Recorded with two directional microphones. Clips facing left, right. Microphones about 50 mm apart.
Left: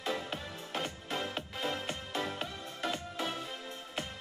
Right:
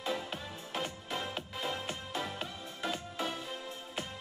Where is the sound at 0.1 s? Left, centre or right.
Centre.